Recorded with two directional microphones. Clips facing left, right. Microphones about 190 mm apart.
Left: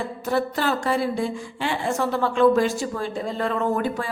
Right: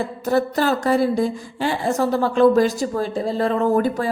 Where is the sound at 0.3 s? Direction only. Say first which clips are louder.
Right 4 dB; 40° right (ahead or behind).